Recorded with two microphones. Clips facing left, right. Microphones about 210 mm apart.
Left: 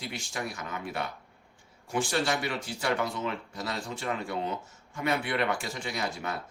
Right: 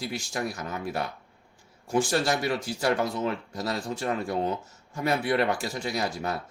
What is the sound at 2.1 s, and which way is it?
Speech, 40° right (ahead or behind).